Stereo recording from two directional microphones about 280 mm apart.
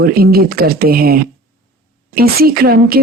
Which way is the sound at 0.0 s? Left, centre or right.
Right.